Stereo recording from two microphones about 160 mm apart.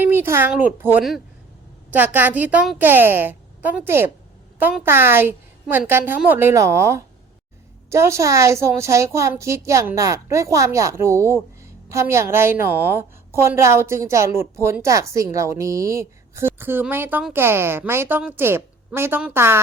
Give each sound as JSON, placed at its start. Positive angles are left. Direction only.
{"t": 0.0, "sound": "a woman's voice", "side_deg": -15}